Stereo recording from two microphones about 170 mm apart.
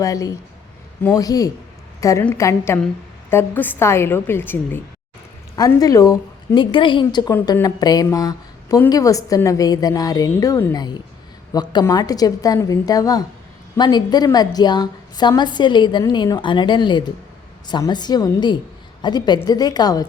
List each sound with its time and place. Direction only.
0.0 s a woman's voice: 20° left (ahead or behind)